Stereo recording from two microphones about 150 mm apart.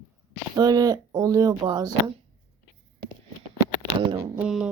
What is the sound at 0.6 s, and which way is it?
Speech, 25° right (ahead or behind).